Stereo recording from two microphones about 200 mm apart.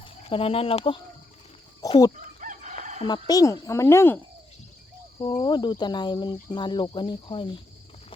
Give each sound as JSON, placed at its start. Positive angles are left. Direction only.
{"t": 0.0, "sound": "speech", "side_deg": 25}
{"t": 2.1, "sound": "chicken", "side_deg": -40}
{"t": 3.0, "sound": "speech", "side_deg": 20}
{"t": 5.3, "sound": "speech", "side_deg": 20}